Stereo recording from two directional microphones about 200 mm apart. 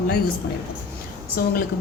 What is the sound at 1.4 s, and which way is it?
Speech, 50° left (ahead or behind).